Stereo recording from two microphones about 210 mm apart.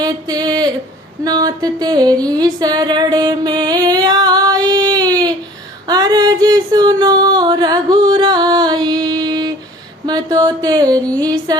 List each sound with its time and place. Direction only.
0.0 s a sound: 20° right (ahead or behind)
5.9 s music: 20° right (ahead or behind)
10.1 s mantra: 20° right (ahead or behind)
11.2 s music: 20° right (ahead or behind)